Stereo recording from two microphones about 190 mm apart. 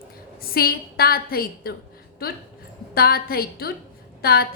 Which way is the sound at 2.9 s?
55° left (ahead or behind).